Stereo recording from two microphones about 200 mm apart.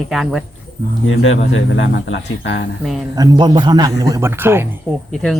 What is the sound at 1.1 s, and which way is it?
Speech, 70° left (ahead or behind).